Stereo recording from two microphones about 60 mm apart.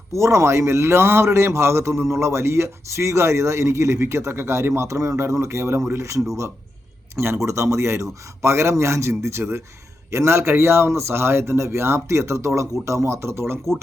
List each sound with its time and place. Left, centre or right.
0.1 s a man's voice: right